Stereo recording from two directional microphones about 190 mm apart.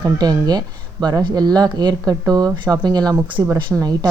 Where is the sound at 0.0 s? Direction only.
20° right (ahead or behind).